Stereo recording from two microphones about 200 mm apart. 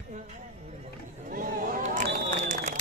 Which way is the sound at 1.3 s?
45° right (ahead or behind).